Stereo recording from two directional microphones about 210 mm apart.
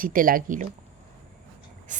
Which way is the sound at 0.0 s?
40° right (ahead or behind).